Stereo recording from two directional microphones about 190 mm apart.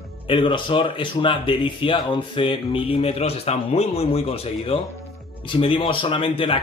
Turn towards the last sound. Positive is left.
turn(degrees=25)  # may be behind; listen again after turning